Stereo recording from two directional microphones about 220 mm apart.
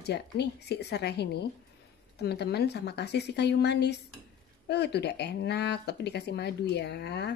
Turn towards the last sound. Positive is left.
turn(degrees=50)  # may be behind; listen again after turning